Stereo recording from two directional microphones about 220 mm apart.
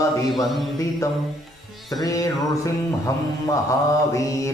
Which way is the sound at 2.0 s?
15° left (ahead or behind).